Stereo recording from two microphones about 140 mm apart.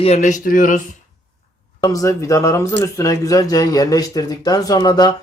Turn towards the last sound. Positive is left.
turn(degrees=30)  # may be behind; listen again after turning